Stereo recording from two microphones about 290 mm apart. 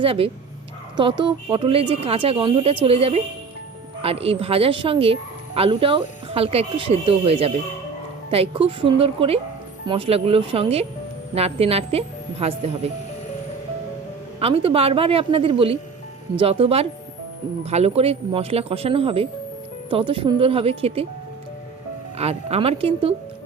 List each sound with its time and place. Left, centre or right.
0.0 s speech: centre
14.3 s speech: centre
22.2 s speech: right